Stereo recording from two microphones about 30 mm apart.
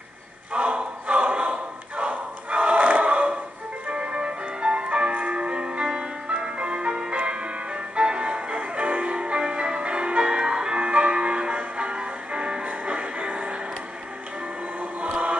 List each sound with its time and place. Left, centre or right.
0.5 s a sound: right
1.2 s crowd: right
3.9 s music: right
10.8 s music: right